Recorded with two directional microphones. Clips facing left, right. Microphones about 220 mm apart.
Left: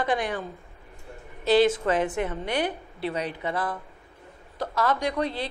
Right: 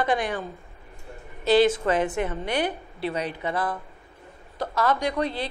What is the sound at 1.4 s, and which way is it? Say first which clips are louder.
A woman's voice: right 1 dB; 15° right (ahead or behind).